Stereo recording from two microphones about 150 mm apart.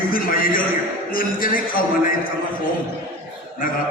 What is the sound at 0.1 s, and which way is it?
A man's voice, 70° left (ahead or behind).